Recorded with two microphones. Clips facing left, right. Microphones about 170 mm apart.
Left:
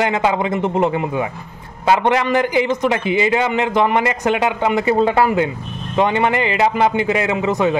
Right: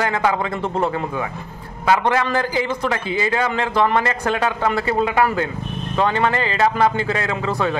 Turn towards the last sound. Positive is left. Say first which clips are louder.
# left 4 dB
turn(degrees=15)  # may be behind; listen again after turning